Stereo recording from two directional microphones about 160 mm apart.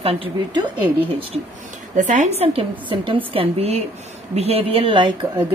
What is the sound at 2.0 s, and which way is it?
A woman's voice, 50° right (ahead or behind).